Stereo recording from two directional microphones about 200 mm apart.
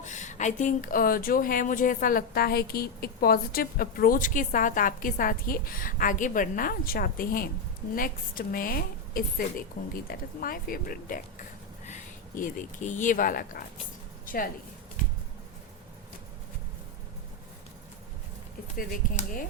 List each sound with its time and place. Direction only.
0.0 s speech: 35° left (ahead or behind)
18.8 s speech: 45° left (ahead or behind)